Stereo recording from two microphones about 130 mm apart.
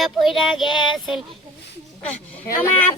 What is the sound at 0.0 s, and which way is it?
Child singing, centre (ahead or behind).